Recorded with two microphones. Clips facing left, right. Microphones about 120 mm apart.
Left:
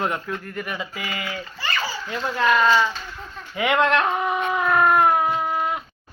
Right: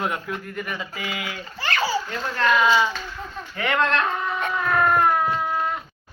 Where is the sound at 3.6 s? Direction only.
15° left (ahead or behind).